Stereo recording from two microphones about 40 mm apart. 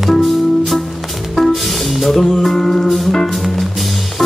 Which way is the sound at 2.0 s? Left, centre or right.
Centre.